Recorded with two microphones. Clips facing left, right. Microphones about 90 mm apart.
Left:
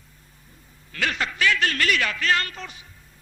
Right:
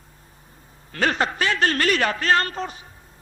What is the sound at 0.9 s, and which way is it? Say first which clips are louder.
A man's voice: right 5 dB; 40° right (ahead or behind).